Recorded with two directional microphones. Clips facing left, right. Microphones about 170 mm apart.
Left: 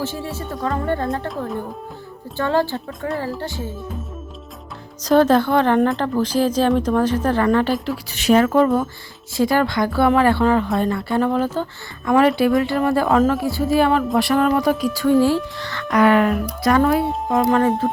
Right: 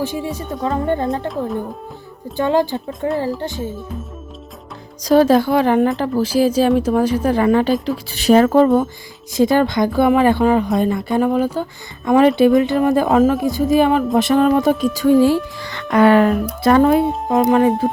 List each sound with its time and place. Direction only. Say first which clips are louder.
0.0 s speech: right 4 dB; 15° right (ahead or behind)
2.3 s a woman's voice: right 3 dB; 15° right (ahead or behind)
5.0 s speech: right 2 dB; 10° right (ahead or behind)
8.1 s speech: right 3 dB; 35° right (ahead or behind)
9.3 s a woman's voice: right 3 dB; 20° right (ahead or behind)